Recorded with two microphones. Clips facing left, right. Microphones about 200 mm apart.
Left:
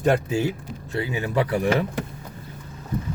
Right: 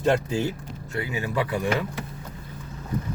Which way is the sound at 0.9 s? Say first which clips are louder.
Left 3 dB; 30° left (ahead or behind).